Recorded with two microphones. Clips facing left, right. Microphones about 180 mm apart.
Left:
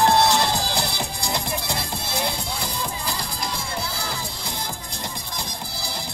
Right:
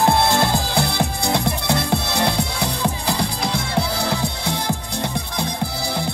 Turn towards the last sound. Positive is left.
turn(degrees=-60)  # may be behind; listen again after turning